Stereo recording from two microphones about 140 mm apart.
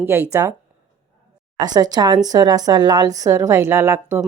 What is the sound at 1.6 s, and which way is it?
A woman's voice, 30° right (ahead or behind).